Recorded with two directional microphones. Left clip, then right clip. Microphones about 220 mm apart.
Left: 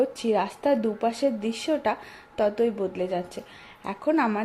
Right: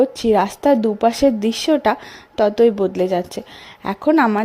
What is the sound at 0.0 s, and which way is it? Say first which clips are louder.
A woman's voice: right 9 dB; 35° right (ahead or behind).